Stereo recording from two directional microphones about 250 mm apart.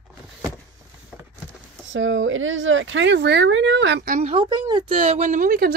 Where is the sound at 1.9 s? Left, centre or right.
Right.